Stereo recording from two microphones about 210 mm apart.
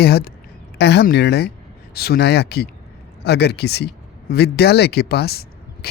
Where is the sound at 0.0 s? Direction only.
50° left (ahead or behind).